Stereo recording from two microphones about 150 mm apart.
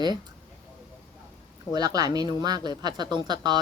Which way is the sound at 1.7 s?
25° right (ahead or behind).